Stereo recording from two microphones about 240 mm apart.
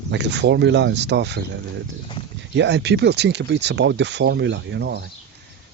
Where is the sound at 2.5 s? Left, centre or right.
Right.